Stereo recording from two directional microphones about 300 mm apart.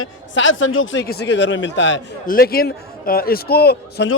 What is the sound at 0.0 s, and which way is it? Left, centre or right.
A man's voice, left.